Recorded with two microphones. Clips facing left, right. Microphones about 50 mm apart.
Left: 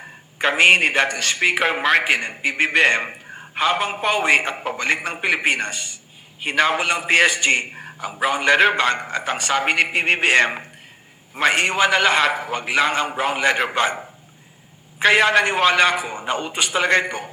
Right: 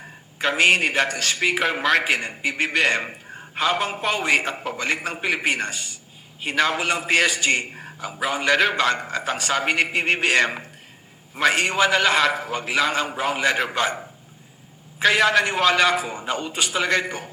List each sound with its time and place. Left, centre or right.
0.3 s a man's voice: left
4.8 s a man's voice: left
7.7 s a sound: left
8.2 s a man's voice: left